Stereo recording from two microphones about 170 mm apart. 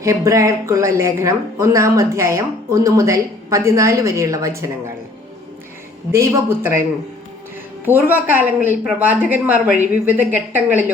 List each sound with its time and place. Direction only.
0.0 s speech: 20° right (ahead or behind)
6.1 s speech: 15° right (ahead or behind)
7.9 s speech: 10° right (ahead or behind)